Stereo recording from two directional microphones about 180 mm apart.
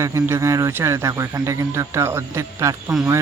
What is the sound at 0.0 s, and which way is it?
Speech, 15° right (ahead or behind).